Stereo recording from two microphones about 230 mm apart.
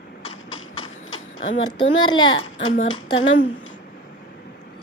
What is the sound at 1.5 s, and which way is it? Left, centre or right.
A child's voice, left.